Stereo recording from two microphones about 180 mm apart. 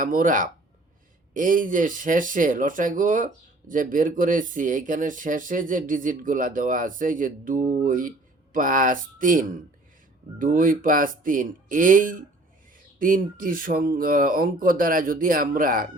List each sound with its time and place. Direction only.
0.0 s speech: 50° right (ahead or behind)